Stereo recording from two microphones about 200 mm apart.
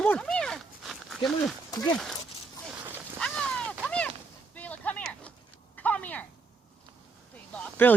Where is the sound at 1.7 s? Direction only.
20° left (ahead or behind).